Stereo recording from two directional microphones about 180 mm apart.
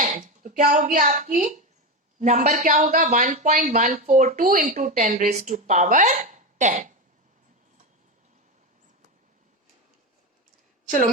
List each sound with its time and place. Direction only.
0.0 s speech: 45° right (ahead or behind)